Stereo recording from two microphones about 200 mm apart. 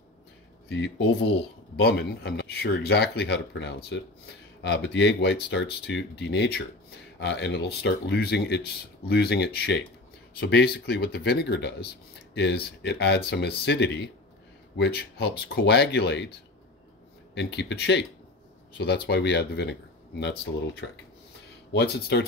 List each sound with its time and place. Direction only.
0.7 s speech: 60° left (ahead or behind)
17.3 s speech: 60° left (ahead or behind)
19.0 s speech: 55° left (ahead or behind)
21.7 s speech: 55° left (ahead or behind)